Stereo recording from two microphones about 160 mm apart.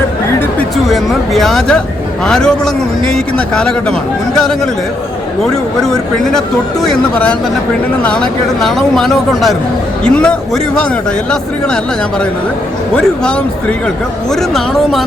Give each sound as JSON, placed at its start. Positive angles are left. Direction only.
{"t": 0.9, "sound": "speech", "side_deg": 0}
{"t": 13.0, "sound": "speech", "side_deg": 5}